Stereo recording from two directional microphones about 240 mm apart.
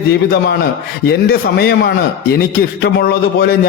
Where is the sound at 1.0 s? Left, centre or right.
Left.